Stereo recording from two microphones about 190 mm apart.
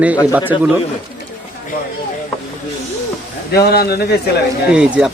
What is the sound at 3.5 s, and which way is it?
Speech, 55° left (ahead or behind).